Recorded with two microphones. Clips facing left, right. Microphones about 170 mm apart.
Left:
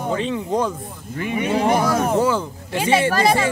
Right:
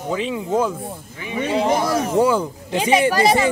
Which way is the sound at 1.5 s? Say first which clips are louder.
Even; 55° left (ahead or behind).